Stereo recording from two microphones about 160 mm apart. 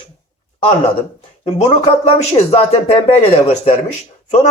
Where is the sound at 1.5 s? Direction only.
40° left (ahead or behind).